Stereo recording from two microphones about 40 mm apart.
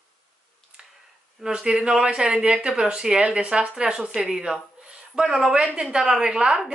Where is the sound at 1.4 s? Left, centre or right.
Centre.